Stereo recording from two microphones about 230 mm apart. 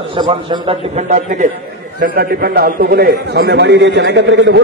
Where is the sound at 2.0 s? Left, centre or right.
Right.